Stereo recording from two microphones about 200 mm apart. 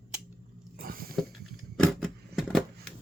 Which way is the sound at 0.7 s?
45° right (ahead or behind).